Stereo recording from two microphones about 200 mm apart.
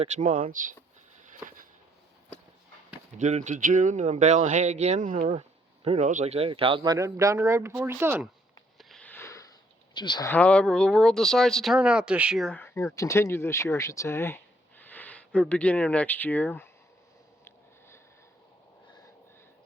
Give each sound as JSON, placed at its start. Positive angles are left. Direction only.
{"t": 0.0, "sound": "speech", "side_deg": -40}
{"t": 1.2, "sound": "a sound", "side_deg": -40}
{"t": 3.2, "sound": "speech", "side_deg": -35}
{"t": 8.8, "sound": "sniff", "side_deg": 5}
{"t": 9.9, "sound": "speech", "side_deg": 20}
{"t": 10.2, "sound": "speech", "side_deg": 5}
{"t": 17.4, "sound": "a sound", "side_deg": 10}